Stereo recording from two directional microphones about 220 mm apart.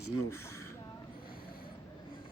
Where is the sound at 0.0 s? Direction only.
90° left.